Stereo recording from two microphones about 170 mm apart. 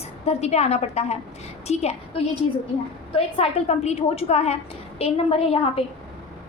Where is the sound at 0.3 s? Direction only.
40° left (ahead or behind).